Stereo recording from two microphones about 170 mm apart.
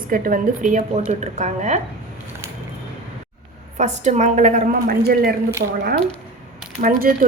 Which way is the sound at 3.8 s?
45° right (ahead or behind).